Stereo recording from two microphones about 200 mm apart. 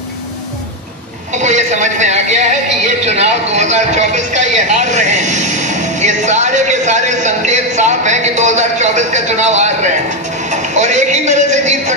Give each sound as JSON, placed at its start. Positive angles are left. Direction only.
{"t": 1.3, "sound": "a man's voice", "side_deg": -35}